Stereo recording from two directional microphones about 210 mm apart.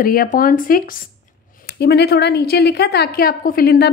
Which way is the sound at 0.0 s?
40° left (ahead or behind).